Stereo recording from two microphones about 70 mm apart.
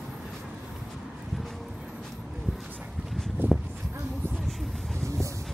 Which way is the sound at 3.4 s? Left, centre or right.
Right.